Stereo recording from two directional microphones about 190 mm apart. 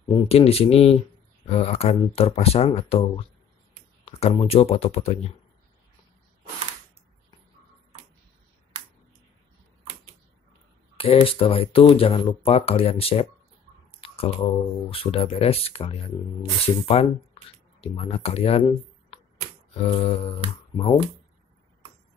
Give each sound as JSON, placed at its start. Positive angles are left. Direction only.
{"t": 0.1, "sound": "speech", "side_deg": 30}
{"t": 11.0, "sound": "speech", "side_deg": 30}
{"t": 14.0, "sound": "a sound", "side_deg": 30}
{"t": 14.9, "sound": "speech", "side_deg": 30}